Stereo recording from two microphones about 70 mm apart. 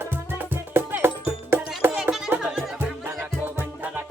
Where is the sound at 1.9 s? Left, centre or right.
Centre.